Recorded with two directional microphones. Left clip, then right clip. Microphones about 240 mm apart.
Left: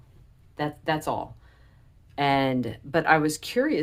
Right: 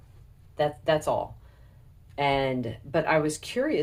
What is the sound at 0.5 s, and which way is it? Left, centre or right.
Speech, left.